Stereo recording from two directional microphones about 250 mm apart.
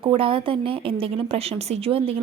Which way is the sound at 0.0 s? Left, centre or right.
Right.